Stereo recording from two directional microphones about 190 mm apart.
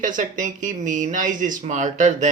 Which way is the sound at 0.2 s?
45° right (ahead or behind).